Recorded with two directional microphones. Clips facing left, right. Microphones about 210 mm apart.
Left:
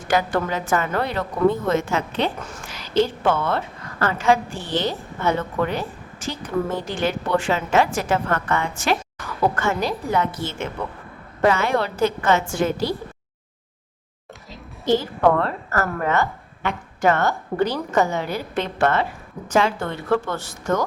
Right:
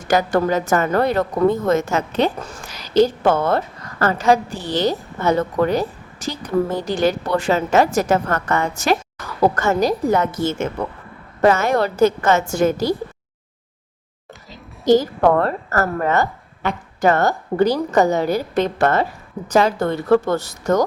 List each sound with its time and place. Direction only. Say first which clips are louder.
0.1 s a woman's voice: right 5 dB; 40° right (ahead or behind)
14.8 s a woman's voice: right 4 dB; 40° right (ahead or behind)